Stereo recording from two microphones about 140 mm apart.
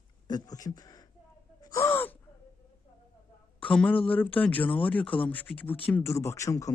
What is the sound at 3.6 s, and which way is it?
A man's voice, 10° left (ahead or behind).